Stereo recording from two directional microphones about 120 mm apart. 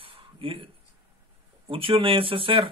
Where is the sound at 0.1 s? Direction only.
45° right (ahead or behind).